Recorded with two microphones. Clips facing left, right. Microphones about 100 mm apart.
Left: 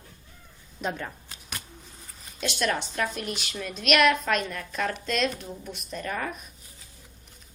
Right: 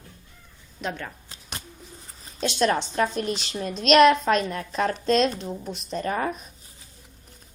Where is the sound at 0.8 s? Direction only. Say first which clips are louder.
Even; 5° left (ahead or behind).